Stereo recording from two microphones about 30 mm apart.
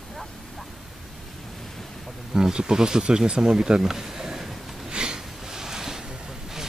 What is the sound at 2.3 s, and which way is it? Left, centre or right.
Speech, right.